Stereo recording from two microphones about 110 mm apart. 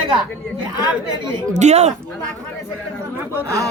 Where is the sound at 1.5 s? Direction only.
90° right.